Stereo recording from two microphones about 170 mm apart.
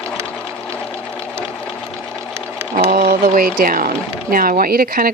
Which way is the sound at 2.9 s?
55° right (ahead or behind).